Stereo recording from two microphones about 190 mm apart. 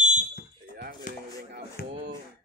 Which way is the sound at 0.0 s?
40° right (ahead or behind).